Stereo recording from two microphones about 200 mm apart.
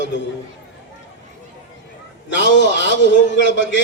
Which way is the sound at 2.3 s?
65° left (ahead or behind).